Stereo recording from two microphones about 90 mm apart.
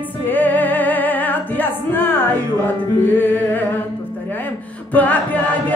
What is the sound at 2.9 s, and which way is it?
Music, 20° left (ahead or behind).